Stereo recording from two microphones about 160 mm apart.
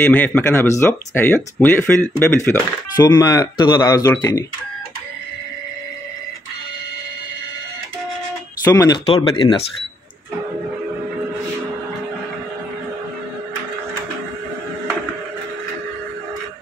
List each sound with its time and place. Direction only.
0.0 s speech: 10° left (ahead or behind)
8.6 s speech: 20° left (ahead or behind)